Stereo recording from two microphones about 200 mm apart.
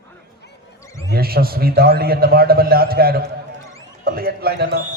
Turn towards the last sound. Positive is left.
turn(degrees=-50)  # may be behind; listen again after turning